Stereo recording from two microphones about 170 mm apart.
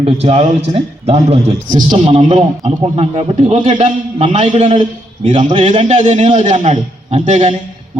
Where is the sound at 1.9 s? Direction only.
30° right (ahead or behind).